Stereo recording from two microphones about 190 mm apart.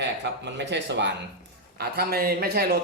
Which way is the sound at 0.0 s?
65° right (ahead or behind).